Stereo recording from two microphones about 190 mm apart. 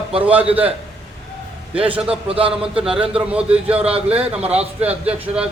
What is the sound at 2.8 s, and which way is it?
Speech, 5° right (ahead or behind).